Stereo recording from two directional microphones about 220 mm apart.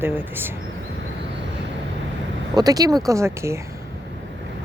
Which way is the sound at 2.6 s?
15° right (ahead or behind).